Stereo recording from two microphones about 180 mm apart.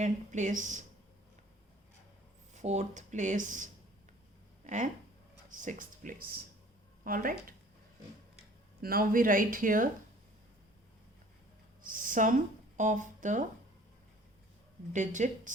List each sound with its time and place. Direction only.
0.0 s speech: 45° right (ahead or behind)
2.5 s speech: 40° right (ahead or behind)
8.8 s speech: 55° right (ahead or behind)
11.8 s speech: 50° right (ahead or behind)
14.9 s speech: 45° right (ahead or behind)